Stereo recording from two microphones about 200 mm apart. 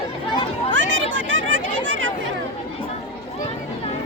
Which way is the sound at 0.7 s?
70° right (ahead or behind).